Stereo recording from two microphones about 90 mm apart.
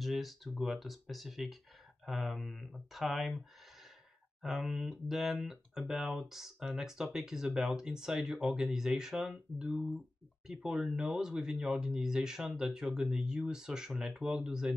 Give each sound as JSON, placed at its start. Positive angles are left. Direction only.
{"t": 0.0, "sound": "speech", "side_deg": 0}